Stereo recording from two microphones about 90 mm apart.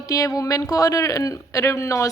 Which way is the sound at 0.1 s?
40° left (ahead or behind).